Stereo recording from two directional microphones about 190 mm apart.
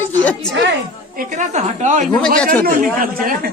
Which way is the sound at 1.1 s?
45° right (ahead or behind).